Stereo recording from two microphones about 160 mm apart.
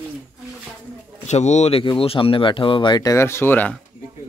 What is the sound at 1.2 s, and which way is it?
Speech, 45° left (ahead or behind).